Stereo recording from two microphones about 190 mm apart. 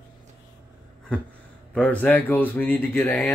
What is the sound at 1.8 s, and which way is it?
Speech, 5° left (ahead or behind).